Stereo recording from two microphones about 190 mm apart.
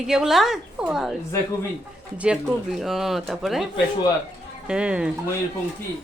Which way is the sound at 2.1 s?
5° right (ahead or behind).